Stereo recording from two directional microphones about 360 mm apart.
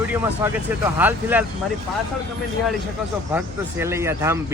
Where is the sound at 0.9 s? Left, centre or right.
Centre.